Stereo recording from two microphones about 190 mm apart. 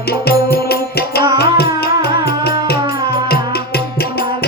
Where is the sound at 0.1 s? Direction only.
55° left (ahead or behind).